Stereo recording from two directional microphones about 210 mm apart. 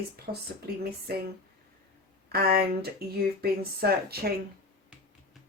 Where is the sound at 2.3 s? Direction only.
50° right (ahead or behind).